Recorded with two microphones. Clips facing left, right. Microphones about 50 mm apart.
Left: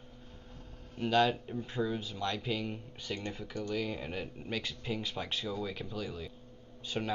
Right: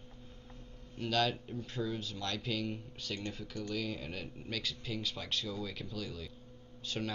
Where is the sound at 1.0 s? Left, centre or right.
Centre.